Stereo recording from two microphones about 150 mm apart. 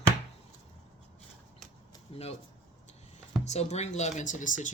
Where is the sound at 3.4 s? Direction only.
45° left (ahead or behind).